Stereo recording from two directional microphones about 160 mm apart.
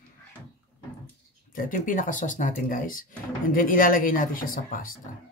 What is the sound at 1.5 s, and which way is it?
Speech, 60° left (ahead or behind).